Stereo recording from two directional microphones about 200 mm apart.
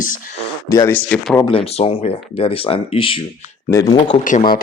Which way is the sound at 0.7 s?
15° left (ahead or behind).